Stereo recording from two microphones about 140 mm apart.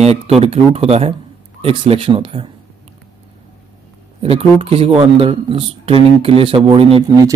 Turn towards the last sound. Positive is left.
turn(degrees=-45)  # may be behind; listen again after turning